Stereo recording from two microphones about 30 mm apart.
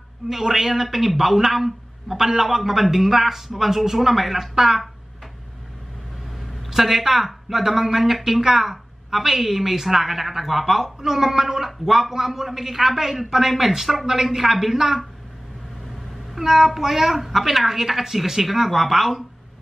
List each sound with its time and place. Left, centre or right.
0.3 s speech: centre
6.6 s speech: centre
14.0 s speech: centre
16.3 s speech: centre